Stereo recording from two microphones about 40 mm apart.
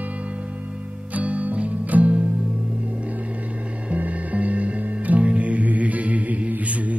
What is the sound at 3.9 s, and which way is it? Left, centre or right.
Music, right.